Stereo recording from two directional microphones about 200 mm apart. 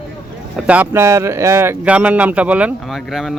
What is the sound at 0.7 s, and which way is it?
A man's voice, 10° right (ahead or behind).